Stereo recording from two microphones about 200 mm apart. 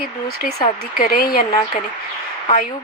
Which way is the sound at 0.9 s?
45° left (ahead or behind).